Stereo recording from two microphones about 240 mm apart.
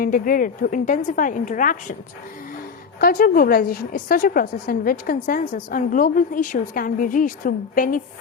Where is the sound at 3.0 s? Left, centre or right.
Left.